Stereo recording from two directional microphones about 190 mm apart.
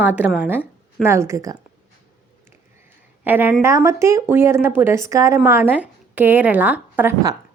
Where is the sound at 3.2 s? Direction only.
10° right (ahead or behind).